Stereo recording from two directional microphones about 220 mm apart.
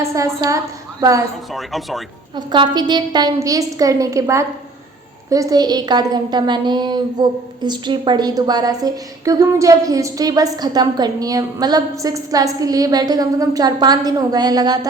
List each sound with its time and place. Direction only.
0.0 s a woman's voice: 15° right (ahead or behind)
1.5 s speech: centre (ahead or behind)
2.3 s a woman's voice: 20° right (ahead or behind)